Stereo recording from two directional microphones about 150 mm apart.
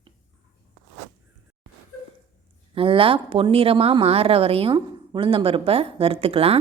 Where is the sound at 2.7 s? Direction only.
35° right (ahead or behind).